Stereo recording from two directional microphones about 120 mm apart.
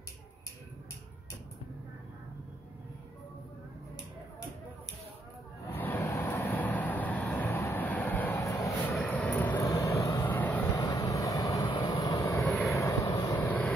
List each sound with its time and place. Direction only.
5.7 s vehicle: 15° left (ahead or behind)
8.4 s vehicle: 25° left (ahead or behind)
8.8 s vehicle: 15° left (ahead or behind)
9.6 s vehicle: 30° left (ahead or behind)
10.2 s vehicle: 15° left (ahead or behind)
10.7 s vehicle: 30° left (ahead or behind); by 12.7 s 15° left (ahead or behind)
12.7 s vehicle: 25° left (ahead or behind)
13.4 s vehicle: 15° left (ahead or behind)